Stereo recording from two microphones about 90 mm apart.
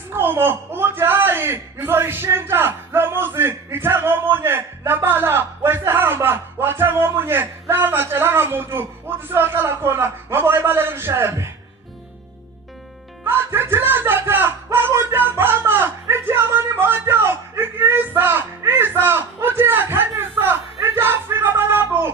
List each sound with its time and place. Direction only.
0.1 s a man's voice: 25° right (ahead or behind)
13.2 s music: 25° right (ahead or behind)
18.6 s a man's voice: 25° right (ahead or behind)
20.8 s a sound: 25° right (ahead or behind)